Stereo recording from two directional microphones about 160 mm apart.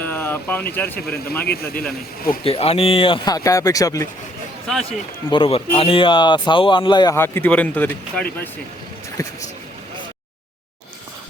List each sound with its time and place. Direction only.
0.0 s speech: 10° left (ahead or behind)
1.5 s speech: 75° left (ahead or behind)
2.4 s speech: 35° left (ahead or behind); by 4.0 s 20° left (ahead or behind)
4.9 s speech: 35° left (ahead or behind)
7.2 s speech: 10° left (ahead or behind)
9.2 s speech: 20° left (ahead or behind)